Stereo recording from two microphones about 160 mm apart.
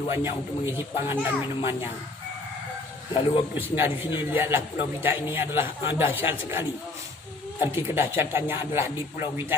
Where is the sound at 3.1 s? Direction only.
30° left (ahead or behind).